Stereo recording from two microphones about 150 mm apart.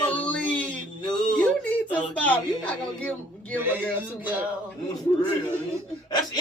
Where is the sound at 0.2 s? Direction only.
10° left (ahead or behind).